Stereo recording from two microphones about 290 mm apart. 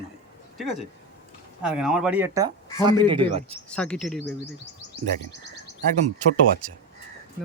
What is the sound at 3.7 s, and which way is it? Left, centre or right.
Speech, centre.